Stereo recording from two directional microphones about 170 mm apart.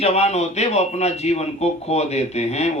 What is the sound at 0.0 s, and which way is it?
Speech, 40° left (ahead or behind).